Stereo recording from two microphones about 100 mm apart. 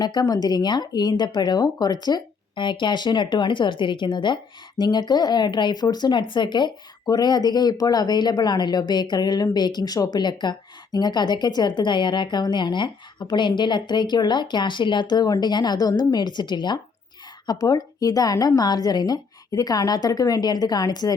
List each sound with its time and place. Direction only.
0.0 s speech: 45° left (ahead or behind)